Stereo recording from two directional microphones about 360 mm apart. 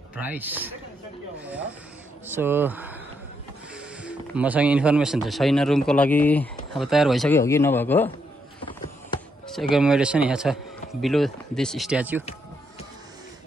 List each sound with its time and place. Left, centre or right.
0.1 s speech: centre
2.2 s speech: centre
9.5 s speech: centre